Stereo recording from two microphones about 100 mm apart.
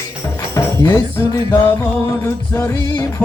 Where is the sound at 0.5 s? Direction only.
25° left (ahead or behind).